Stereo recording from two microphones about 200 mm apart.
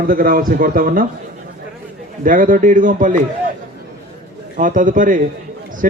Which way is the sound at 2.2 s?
40° right (ahead or behind).